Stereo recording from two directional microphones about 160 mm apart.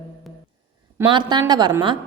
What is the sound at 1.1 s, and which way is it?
Speech, 25° right (ahead or behind).